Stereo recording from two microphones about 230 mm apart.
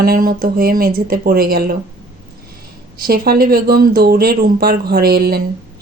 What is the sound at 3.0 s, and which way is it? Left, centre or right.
A woman's voice, right.